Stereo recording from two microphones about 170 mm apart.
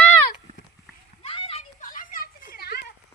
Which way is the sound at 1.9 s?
55° left (ahead or behind).